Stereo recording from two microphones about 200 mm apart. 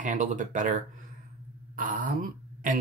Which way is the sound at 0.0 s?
40° right (ahead or behind).